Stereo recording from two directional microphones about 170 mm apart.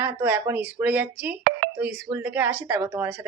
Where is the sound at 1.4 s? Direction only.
90° right.